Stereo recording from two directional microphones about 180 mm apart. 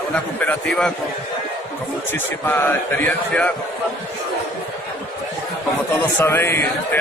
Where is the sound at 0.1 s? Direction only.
5° left (ahead or behind).